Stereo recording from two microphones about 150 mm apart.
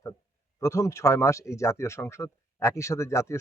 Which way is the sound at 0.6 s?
20° left (ahead or behind).